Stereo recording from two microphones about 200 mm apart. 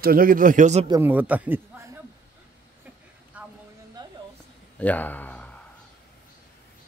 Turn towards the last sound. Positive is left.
turn(degrees=10)  # may be behind; listen again after turning